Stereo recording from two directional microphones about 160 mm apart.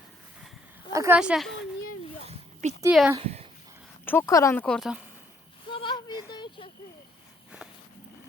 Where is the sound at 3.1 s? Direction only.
35° right (ahead or behind).